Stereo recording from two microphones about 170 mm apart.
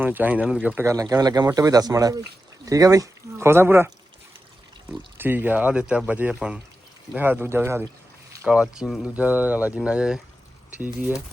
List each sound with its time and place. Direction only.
0.0 s speech: 10° right (ahead or behind)
5.1 s speech: 10° right (ahead or behind)